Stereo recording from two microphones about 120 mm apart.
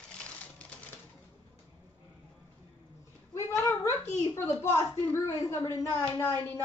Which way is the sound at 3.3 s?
25° left (ahead or behind).